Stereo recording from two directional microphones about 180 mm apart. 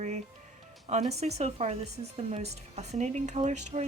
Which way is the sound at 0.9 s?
40° right (ahead or behind).